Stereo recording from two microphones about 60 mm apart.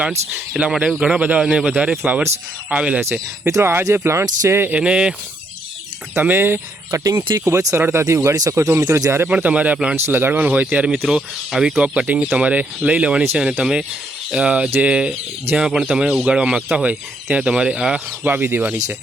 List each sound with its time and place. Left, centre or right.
0.6 s speech: centre
3.0 s speech: right
4.8 s speech: centre
6.1 s speech: right
6.9 s speech: right
7.8 s speech: right
8.3 s speech: right
8.8 s speech: right
9.3 s speech: right
10.1 s speech: right
11.1 s speech: centre
11.8 s speech: centre
18.3 s speech: right